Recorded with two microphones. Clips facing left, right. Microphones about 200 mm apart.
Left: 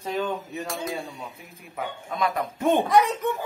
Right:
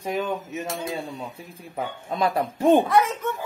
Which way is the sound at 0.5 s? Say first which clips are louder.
Right 1 dB; 25° right (ahead or behind).